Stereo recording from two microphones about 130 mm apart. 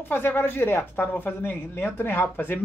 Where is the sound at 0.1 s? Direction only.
15° left (ahead or behind).